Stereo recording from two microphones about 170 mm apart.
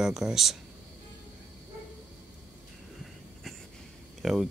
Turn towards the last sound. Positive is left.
turn(degrees=0)  # may be behind; listen again after turning